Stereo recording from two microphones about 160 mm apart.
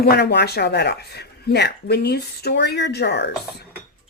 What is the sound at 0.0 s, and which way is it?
Speech, 85° left.